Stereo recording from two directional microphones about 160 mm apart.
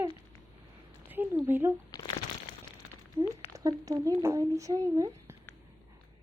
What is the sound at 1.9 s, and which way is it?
Crumpling, 25° left (ahead or behind).